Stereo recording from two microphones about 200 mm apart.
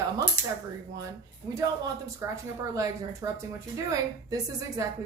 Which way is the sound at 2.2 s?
15° right (ahead or behind).